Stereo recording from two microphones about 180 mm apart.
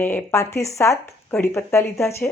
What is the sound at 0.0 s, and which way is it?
Speech, 10° left (ahead or behind).